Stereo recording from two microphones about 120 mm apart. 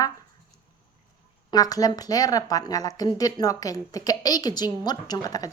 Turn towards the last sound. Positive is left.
turn(degrees=30)  # may be behind; listen again after turning